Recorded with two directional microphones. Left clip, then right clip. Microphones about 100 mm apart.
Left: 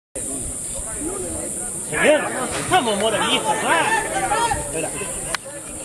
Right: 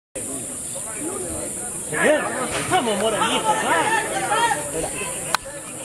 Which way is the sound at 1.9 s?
Centre (ahead or behind).